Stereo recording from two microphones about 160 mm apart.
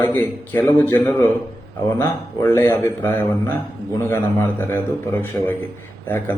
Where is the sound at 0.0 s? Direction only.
15° left (ahead or behind).